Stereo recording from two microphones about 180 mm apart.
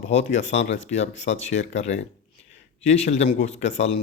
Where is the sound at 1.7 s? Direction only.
90° left.